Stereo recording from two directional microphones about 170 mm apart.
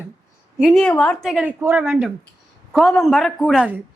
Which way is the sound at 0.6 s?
Centre (ahead or behind).